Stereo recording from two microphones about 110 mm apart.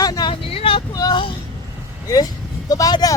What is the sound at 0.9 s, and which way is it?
Child singing, 40° left (ahead or behind).